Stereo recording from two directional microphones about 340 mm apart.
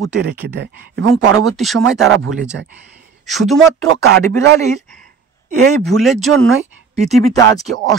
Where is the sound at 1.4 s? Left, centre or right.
Centre.